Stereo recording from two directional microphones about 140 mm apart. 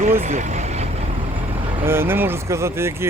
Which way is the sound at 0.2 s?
55° right (ahead or behind).